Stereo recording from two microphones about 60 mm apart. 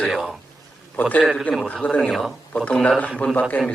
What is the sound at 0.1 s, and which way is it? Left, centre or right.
Speech, centre.